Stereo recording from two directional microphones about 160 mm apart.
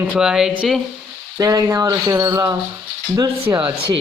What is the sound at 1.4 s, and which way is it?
Speech, 20° right (ahead or behind).